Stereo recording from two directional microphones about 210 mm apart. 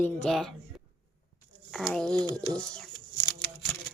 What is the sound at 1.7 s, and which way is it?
Speech, centre (ahead or behind).